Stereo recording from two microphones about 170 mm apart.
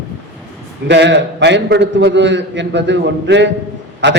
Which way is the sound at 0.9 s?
90° right.